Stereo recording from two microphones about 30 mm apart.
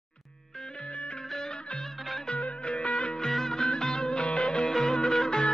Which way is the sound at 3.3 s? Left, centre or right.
Centre.